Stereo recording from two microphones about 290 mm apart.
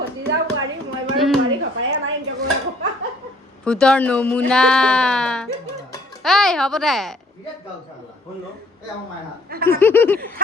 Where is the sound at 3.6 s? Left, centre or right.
Centre.